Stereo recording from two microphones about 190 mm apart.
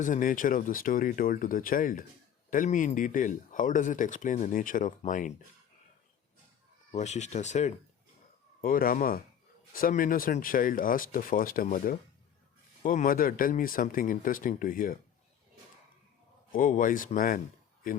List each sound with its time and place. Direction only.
0.0 s speech: 45° left (ahead or behind)
6.9 s speech: 40° left (ahead or behind)
8.6 s speech: 50° left (ahead or behind)
16.5 s speech: 45° left (ahead or behind)